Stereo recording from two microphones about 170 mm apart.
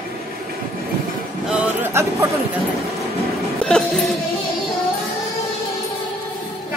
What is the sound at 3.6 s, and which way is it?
Speech, 5° left (ahead or behind).